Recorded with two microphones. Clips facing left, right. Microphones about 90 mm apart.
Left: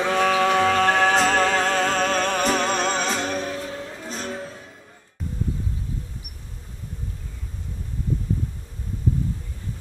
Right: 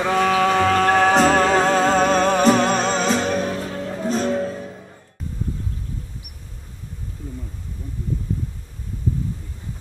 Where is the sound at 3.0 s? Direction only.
30° right (ahead or behind).